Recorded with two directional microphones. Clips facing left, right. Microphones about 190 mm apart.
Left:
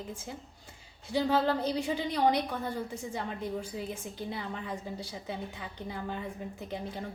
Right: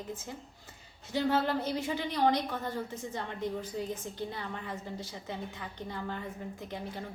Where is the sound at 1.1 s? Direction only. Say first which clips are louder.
Left 2 dB; 15° left (ahead or behind).